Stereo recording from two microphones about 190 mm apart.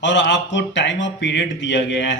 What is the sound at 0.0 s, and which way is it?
Speech, 70° left (ahead or behind).